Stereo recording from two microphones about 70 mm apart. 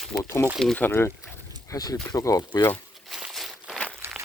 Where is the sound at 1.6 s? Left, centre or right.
Left.